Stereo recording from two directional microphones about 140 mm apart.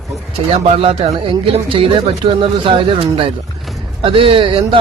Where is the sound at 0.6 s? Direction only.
45° right (ahead or behind).